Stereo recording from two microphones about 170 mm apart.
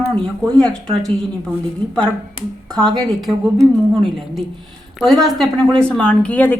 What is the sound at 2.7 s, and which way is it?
Speech, 5° left (ahead or behind).